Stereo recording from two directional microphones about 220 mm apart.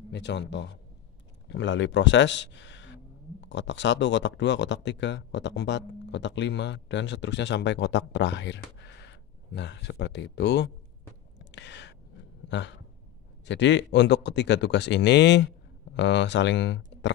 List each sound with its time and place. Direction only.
0.1 s speech: 50° left (ahead or behind)
11.3 s a sound: 50° left (ahead or behind)
13.5 s speech: 55° left (ahead or behind)